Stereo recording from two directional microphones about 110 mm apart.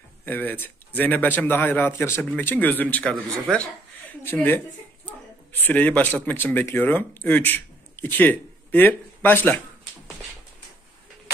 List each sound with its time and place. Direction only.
0.2 s a man's voice: 15° left (ahead or behind)
4.2 s speech: 20° left (ahead or behind)